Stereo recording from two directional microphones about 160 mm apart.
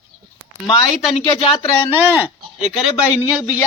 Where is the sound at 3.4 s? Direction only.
20° left (ahead or behind).